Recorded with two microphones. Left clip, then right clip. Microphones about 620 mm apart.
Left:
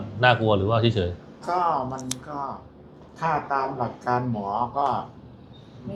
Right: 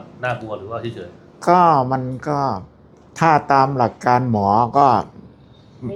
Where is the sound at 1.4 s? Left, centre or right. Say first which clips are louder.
Right 11 dB; right.